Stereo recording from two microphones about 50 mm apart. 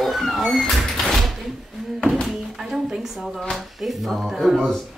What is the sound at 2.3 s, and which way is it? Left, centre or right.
Speech, centre.